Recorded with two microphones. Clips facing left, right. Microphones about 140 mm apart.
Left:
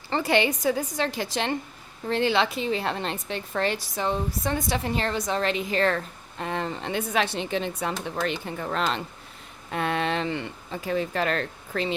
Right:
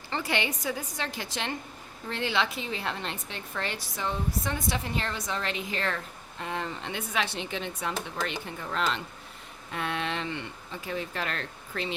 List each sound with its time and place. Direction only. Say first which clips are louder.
0.1 s a woman's voice: left 7 dB; 40° left (ahead or behind)